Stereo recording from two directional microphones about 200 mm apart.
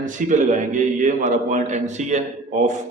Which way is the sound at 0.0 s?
40° right (ahead or behind).